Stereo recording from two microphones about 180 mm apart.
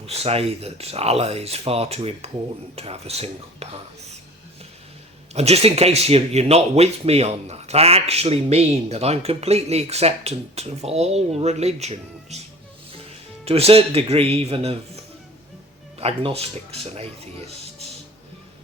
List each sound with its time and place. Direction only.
0.0 s speech: 35° right (ahead or behind)
5.3 s speech: 35° right (ahead or behind)
13.4 s speech: 35° right (ahead or behind)